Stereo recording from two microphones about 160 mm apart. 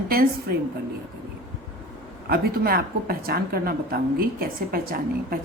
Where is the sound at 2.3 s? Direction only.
70° right (ahead or behind).